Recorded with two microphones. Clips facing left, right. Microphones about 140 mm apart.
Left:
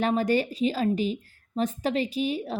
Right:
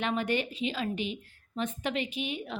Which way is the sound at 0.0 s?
40° left (ahead or behind).